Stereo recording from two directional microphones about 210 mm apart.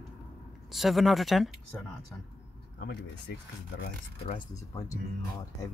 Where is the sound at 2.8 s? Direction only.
55° left (ahead or behind).